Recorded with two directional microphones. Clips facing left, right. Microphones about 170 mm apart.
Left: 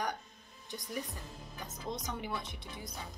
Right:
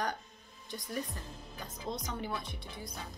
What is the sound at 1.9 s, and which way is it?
Speech, 15° left (ahead or behind).